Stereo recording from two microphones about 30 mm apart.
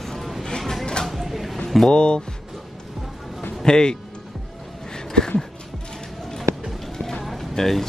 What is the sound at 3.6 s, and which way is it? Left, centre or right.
Speech, left.